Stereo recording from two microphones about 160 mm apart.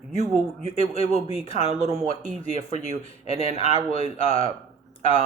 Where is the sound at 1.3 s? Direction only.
35° left (ahead or behind).